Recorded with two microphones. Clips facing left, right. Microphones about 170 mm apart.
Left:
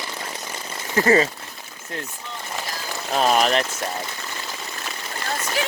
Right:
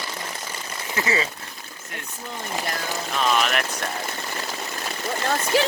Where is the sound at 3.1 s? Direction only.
40° left (ahead or behind).